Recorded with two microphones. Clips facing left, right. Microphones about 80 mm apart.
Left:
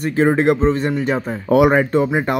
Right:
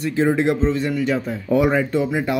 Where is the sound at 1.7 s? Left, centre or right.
Left.